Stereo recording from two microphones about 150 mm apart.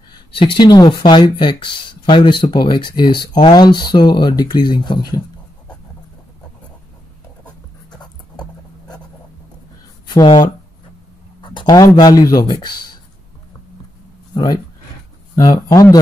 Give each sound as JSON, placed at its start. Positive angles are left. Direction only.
{"t": 0.3, "sound": "speech", "side_deg": 35}
{"t": 7.9, "sound": "writing", "side_deg": 30}
{"t": 10.0, "sound": "speech", "side_deg": 30}
{"t": 14.3, "sound": "speech", "side_deg": 25}